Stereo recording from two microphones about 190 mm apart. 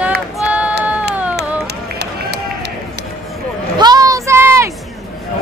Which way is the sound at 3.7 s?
20° right (ahead or behind).